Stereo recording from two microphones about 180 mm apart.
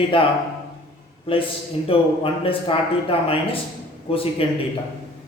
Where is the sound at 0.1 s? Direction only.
30° left (ahead or behind).